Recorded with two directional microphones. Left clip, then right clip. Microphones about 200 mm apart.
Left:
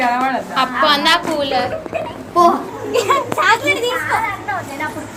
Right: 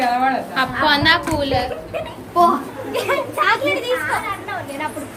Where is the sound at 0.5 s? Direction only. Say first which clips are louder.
Left 6 dB; 20° right (ahead or behind).